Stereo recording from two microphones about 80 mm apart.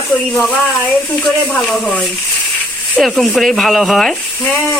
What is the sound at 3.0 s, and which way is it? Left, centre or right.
Speech, centre.